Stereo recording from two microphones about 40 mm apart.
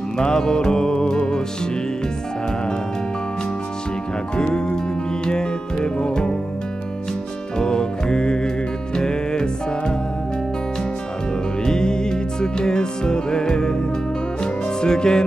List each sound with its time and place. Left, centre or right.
0.2 s music: centre
4.4 s speech: left
5.2 s music: centre
7.5 s music: centre
11.6 s music: centre